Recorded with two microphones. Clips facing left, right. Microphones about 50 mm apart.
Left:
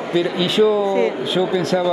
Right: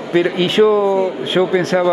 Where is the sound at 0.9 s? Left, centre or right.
Left.